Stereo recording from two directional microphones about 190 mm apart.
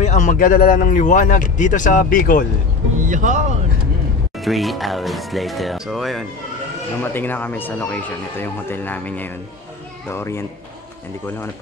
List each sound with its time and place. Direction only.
0.0 s speech: 40° left (ahead or behind)
3.0 s speech: 40° right (ahead or behind)
4.4 s speech: centre (ahead or behind)
7.0 s speech: 10° left (ahead or behind)